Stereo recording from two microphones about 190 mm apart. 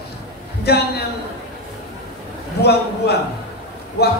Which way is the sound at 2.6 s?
60° left (ahead or behind).